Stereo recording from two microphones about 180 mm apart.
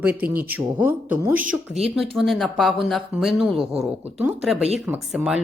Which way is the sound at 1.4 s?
35° right (ahead or behind).